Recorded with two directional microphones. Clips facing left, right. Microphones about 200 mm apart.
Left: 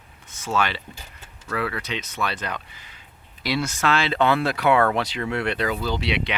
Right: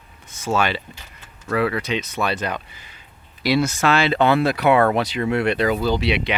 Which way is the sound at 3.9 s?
55° right (ahead or behind).